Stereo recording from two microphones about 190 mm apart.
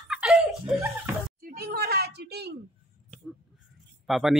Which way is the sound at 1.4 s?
50° right (ahead or behind).